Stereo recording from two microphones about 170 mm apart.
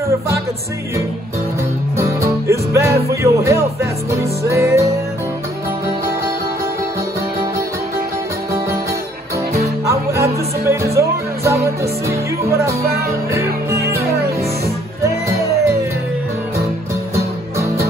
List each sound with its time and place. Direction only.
2.0 s music: 15° right (ahead or behind)
9.8 s music: 15° right (ahead or behind)
15.0 s music: 20° right (ahead or behind)